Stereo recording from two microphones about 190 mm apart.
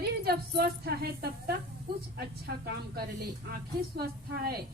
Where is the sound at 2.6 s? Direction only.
55° right (ahead or behind).